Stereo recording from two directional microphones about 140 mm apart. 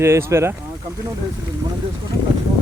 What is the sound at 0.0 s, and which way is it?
Speech, 20° right (ahead or behind).